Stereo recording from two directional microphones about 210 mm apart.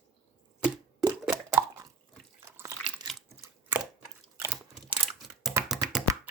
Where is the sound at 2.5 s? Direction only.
15° right (ahead or behind).